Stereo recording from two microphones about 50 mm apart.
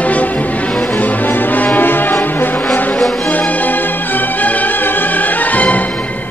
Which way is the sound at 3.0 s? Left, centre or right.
Centre.